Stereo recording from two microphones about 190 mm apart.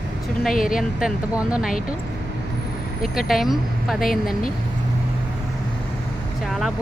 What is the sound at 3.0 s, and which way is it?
Speech, centre (ahead or behind).